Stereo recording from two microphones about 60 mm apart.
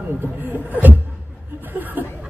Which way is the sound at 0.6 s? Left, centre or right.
Right.